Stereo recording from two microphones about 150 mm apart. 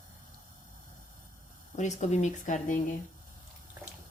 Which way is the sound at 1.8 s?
50° left (ahead or behind).